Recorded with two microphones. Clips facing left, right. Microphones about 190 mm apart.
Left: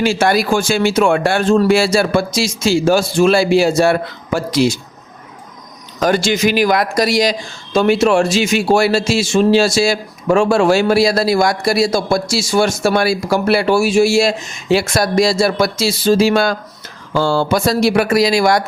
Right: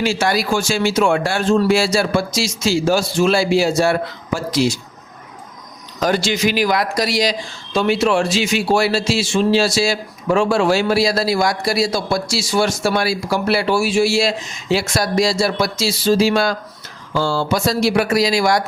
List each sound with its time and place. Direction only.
0.0 s speech: 55° left (ahead or behind)
6.0 s speech: 50° left (ahead or behind)